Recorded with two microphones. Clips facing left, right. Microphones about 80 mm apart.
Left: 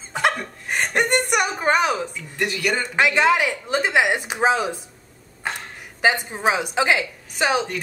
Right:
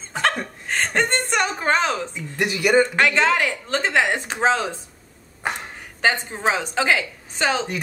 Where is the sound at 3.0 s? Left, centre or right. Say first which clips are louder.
Left 1 dB; centre.